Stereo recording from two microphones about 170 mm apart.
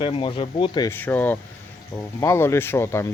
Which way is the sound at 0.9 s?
10° left (ahead or behind).